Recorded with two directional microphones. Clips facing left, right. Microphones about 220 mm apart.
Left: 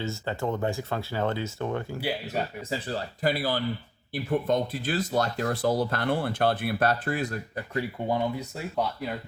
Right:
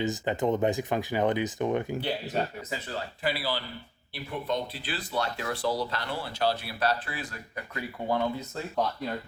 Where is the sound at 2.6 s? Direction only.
30° left (ahead or behind).